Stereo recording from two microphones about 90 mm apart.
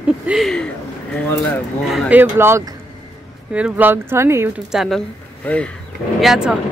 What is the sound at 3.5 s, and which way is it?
Speech, 15° right (ahead or behind).